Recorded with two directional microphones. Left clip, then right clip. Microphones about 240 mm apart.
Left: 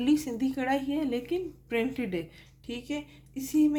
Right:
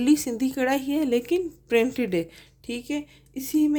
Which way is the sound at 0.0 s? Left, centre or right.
Right.